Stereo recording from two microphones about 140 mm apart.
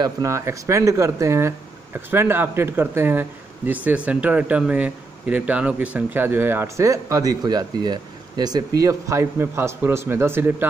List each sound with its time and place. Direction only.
0.0 s speech: 20° right (ahead or behind)